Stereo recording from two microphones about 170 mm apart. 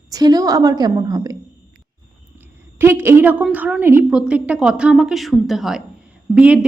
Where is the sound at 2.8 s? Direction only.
15° right (ahead or behind).